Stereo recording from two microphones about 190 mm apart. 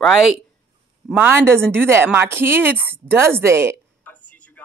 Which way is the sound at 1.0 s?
10° right (ahead or behind).